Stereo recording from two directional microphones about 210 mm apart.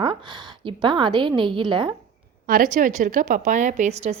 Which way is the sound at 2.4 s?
40° right (ahead or behind).